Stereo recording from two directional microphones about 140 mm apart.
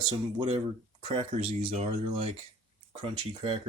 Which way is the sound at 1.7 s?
50° right (ahead or behind).